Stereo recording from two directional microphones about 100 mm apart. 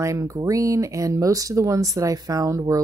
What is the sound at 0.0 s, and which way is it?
Speech, 35° right (ahead or behind).